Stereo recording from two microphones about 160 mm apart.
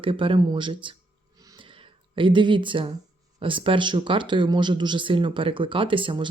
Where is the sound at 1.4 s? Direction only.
25° right (ahead or behind).